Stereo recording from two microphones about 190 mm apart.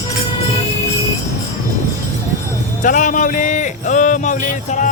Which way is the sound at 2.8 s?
40° left (ahead or behind).